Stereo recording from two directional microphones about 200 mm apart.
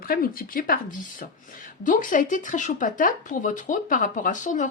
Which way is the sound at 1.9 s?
40° left (ahead or behind).